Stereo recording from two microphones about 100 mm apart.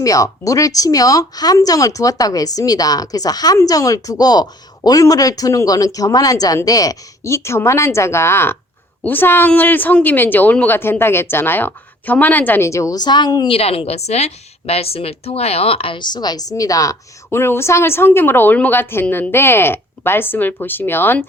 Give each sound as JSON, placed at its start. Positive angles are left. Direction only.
{"t": 0.0, "sound": "a woman's voice", "side_deg": 35}
{"t": 13.5, "sound": "a woman's voice", "side_deg": 80}
{"t": 16.0, "sound": "speech", "side_deg": 45}
{"t": 17.2, "sound": "a woman's voice", "side_deg": 25}